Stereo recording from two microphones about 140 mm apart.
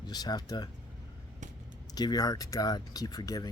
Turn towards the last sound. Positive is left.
turn(degrees=25)  # may be behind; listen again after turning